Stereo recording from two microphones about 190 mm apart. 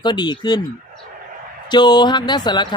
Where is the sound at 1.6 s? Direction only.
25° left (ahead or behind).